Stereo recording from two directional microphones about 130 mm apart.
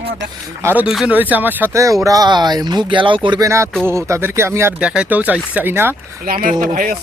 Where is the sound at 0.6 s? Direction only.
10° right (ahead or behind); by 3.4 s 40° right (ahead or behind).